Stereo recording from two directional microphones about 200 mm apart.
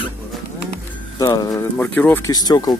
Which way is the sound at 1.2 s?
20° left (ahead or behind).